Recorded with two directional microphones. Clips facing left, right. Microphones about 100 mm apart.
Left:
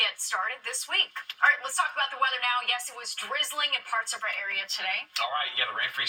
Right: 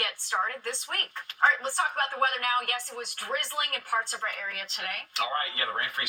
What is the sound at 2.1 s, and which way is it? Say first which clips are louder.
Speech: even; 25° right (ahead or behind).